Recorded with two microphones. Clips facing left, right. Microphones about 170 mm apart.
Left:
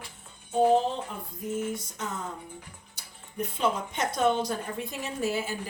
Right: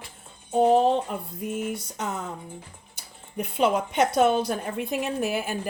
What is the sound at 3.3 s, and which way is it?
A woman's voice, 70° right (ahead or behind).